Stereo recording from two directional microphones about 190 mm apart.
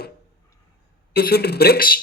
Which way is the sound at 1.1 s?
55° left (ahead or behind).